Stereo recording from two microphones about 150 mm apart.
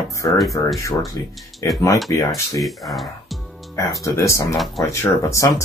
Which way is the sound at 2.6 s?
Centre (ahead or behind).